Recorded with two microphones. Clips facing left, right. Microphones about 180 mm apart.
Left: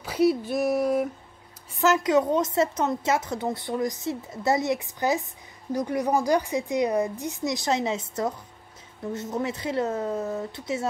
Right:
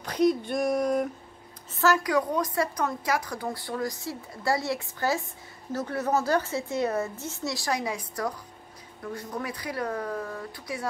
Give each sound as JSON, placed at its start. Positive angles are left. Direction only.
{"t": 0.0, "sound": "speech", "side_deg": 5}
{"t": 1.8, "sound": "a woman's voice", "side_deg": 20}